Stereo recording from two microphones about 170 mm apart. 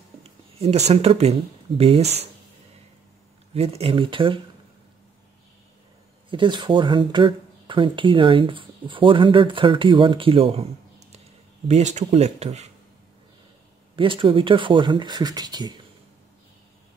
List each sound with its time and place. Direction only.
0.6 s speech: 40° right (ahead or behind)
3.5 s speech: 35° right (ahead or behind)
6.3 s speech: 30° right (ahead or behind)
13.9 s speech: 30° right (ahead or behind)